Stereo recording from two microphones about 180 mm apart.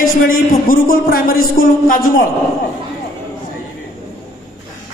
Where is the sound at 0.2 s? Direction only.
50° left (ahead or behind).